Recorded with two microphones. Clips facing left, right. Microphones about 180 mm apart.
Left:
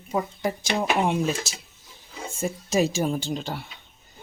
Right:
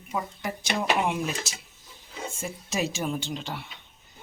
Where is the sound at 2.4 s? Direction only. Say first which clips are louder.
Left 7 dB; 40° left (ahead or behind).